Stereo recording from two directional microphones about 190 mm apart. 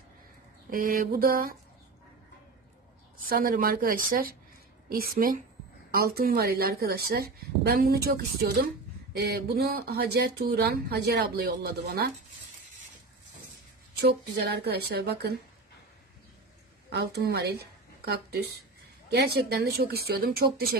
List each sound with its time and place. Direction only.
0.7 s a woman's voice: 50° right (ahead or behind)
3.3 s a woman's voice: 50° right (ahead or behind)
14.0 s speech: 60° right (ahead or behind)
16.9 s a woman's voice: 60° right (ahead or behind)